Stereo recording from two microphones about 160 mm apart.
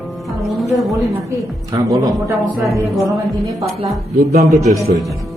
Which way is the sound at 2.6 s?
Centre (ahead or behind).